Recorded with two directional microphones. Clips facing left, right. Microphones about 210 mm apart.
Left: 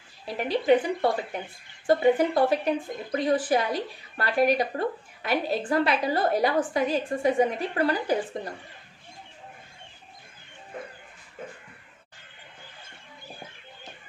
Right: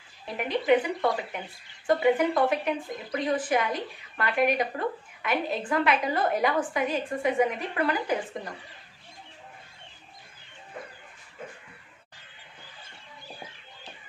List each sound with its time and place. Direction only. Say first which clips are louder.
0.2 s speech: left 2 dB; 30° left (ahead or behind)